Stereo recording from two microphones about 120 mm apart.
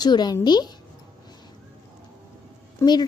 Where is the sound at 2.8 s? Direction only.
35° left (ahead or behind).